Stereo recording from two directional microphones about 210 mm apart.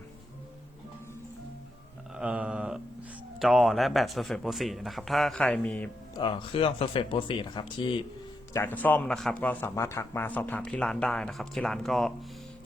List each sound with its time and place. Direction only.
2.1 s a sound: 5° right (ahead or behind)
3.3 s speech: centre (ahead or behind)
6.1 s speech: 25° left (ahead or behind)
8.5 s speech: 10° left (ahead or behind)